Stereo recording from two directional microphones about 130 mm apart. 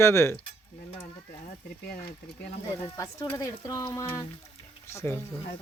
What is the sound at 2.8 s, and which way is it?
Speech, 30° left (ahead or behind).